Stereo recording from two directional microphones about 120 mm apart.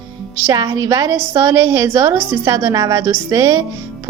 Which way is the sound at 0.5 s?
30° right (ahead or behind).